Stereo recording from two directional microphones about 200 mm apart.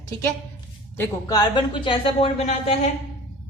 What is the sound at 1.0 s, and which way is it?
A woman's voice, 20° left (ahead or behind).